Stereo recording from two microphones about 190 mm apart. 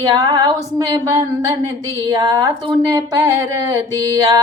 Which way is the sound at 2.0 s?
20° right (ahead or behind).